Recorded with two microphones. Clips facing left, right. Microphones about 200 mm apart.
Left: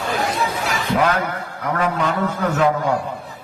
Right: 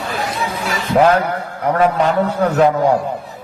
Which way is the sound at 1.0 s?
35° right (ahead or behind).